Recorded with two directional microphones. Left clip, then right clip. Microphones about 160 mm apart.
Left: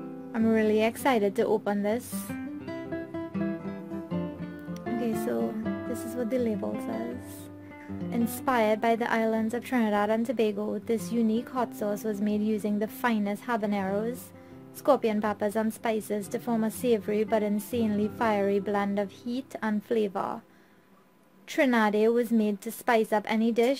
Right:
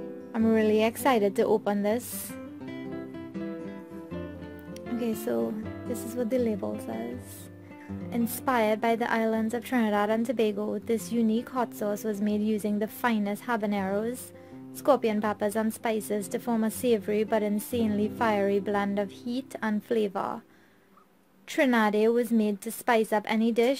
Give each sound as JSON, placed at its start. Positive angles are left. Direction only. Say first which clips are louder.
{"t": 0.3, "sound": "a woman's voice", "louder": "right 1 dB", "side_deg": -10}
{"t": 5.0, "sound": "music", "louder": "right 1 dB", "side_deg": -20}
{"t": 6.1, "sound": "a woman's voice", "louder": "right 2 dB", "side_deg": -15}
{"t": 6.6, "sound": "speech", "louder": "left 1 dB", "side_deg": 0}
{"t": 8.1, "sound": "a woman's voice", "louder": "even", "side_deg": -5}
{"t": 21.5, "sound": "a woman's voice", "louder": "even", "side_deg": -15}